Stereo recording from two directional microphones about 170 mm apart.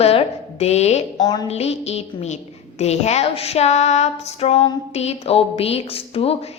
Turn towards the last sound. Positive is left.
turn(degrees=35)  # may be behind; listen again after turning